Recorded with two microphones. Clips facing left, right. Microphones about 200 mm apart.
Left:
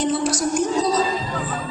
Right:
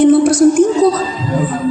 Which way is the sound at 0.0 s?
55° right (ahead or behind).